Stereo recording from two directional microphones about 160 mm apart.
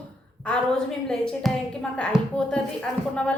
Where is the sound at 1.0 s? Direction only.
5° left (ahead or behind).